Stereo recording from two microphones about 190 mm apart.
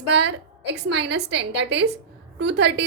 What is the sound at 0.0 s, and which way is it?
A woman's voice, 65° right (ahead or behind).